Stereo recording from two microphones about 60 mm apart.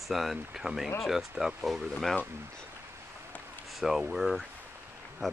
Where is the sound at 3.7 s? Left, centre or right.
Centre.